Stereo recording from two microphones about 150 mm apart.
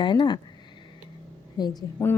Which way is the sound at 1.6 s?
25° left (ahead or behind).